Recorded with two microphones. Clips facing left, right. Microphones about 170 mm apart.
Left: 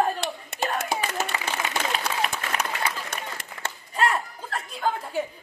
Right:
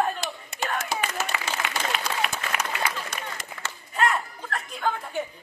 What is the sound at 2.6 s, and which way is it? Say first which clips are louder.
Applause: even; 60° left (ahead or behind).